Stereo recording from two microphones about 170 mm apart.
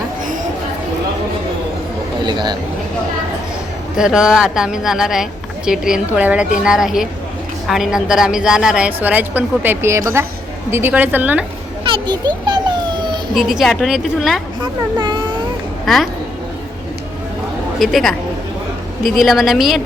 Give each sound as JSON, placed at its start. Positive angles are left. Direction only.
{"t": 2.2, "sound": "speech", "side_deg": -25}
{"t": 3.9, "sound": "a woman's voice", "side_deg": -5}
{"t": 11.9, "sound": "a child's voice", "side_deg": -30}
{"t": 12.5, "sound": "a sound", "side_deg": -25}
{"t": 13.3, "sound": "a woman's voice", "side_deg": 0}
{"t": 14.6, "sound": "speech", "side_deg": -25}
{"t": 17.7, "sound": "a woman's voice", "side_deg": 0}
{"t": 19.2, "sound": "a woman's voice", "side_deg": 0}